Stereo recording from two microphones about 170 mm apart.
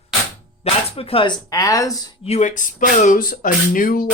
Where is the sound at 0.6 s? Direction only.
35° left (ahead or behind); by 2.0 s 20° left (ahead or behind).